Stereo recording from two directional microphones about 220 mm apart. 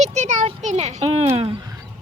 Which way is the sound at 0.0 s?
30° right (ahead or behind).